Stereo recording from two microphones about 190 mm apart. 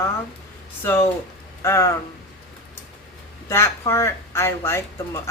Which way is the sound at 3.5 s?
15° left (ahead or behind).